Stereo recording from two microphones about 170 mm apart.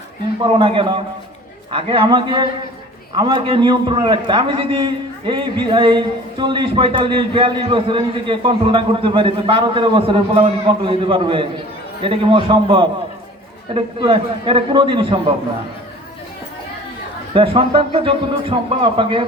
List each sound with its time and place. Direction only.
0.4 s a man's voice: 30° right (ahead or behind)
17.3 s a man's voice: 30° right (ahead or behind)